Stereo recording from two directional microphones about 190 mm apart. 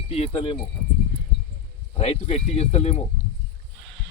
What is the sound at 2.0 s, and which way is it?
Speech, 35° left (ahead or behind).